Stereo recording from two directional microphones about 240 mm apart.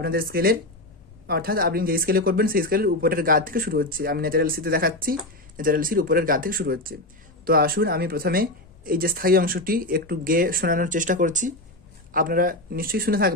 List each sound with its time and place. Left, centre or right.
0.0 s speech: right